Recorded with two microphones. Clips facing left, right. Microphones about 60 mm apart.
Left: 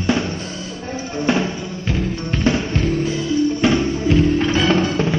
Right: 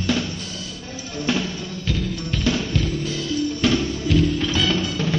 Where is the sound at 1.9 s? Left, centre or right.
Left.